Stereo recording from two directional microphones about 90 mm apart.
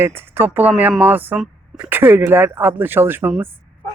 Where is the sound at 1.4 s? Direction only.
5° right (ahead or behind).